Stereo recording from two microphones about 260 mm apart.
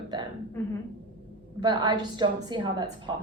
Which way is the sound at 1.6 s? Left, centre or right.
Centre.